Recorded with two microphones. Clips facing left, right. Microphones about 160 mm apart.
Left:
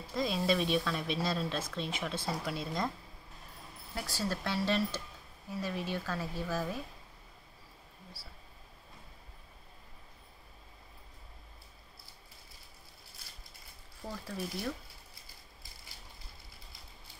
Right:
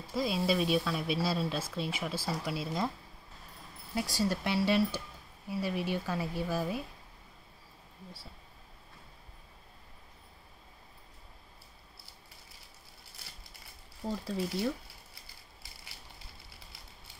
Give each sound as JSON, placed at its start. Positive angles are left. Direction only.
{"t": 0.1, "sound": "speech", "side_deg": -5}
{"t": 3.9, "sound": "a woman's voice", "side_deg": -15}
{"t": 14.2, "sound": "speech", "side_deg": -25}